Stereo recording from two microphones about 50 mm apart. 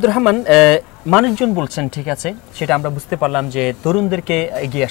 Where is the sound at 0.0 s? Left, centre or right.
Centre.